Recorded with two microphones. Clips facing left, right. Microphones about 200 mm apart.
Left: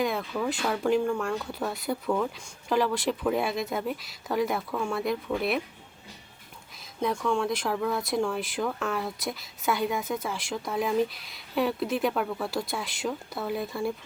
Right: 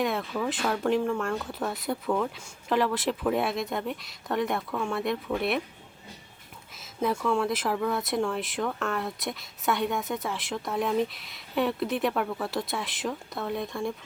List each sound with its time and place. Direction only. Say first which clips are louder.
0.0 s speech: even; centre (ahead or behind)
6.7 s speech: right 1 dB; 5° right (ahead or behind)